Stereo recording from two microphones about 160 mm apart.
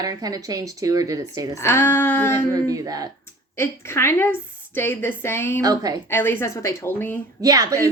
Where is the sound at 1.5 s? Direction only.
15° left (ahead or behind).